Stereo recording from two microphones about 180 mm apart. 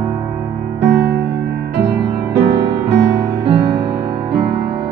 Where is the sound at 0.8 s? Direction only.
75° right (ahead or behind).